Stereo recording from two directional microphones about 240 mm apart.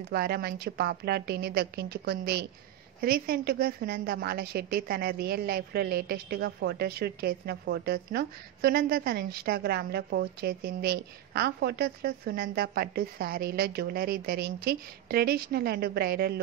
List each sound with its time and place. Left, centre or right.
0.1 s a woman's voice: right